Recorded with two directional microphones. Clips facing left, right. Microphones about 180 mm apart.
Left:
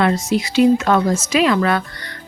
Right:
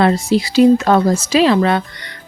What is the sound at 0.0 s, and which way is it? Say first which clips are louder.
Speech: right 3 dB; 30° right (ahead or behind).